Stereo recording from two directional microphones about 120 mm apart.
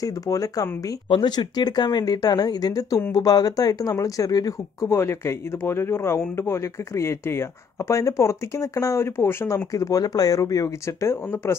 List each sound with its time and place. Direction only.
0.0 s speech: 30° left (ahead or behind)
1.0 s speech: 40° left (ahead or behind); by 11.5 s 25° left (ahead or behind)